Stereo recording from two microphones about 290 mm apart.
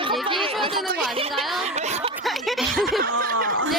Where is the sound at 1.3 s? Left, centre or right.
Centre.